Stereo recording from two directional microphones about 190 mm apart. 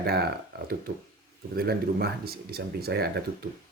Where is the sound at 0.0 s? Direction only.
55° right (ahead or behind).